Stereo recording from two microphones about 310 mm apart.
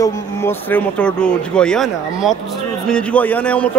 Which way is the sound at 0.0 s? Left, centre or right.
Centre.